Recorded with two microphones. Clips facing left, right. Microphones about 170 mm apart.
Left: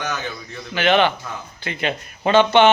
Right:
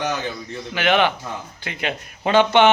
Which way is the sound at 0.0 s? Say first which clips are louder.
Right 3 dB; 30° right (ahead or behind).